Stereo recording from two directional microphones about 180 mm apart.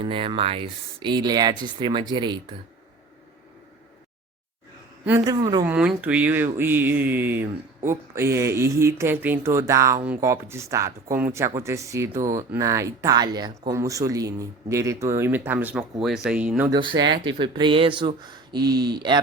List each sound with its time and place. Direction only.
0.0 s speech: 30° right (ahead or behind)
5.2 s speech: 20° right (ahead or behind)
5.6 s speech: 5° right (ahead or behind)
17.0 s speech: 25° right (ahead or behind)